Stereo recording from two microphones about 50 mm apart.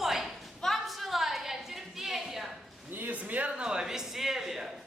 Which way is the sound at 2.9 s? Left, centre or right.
Right.